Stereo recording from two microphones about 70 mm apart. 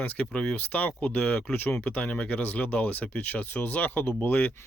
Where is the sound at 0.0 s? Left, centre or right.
Centre.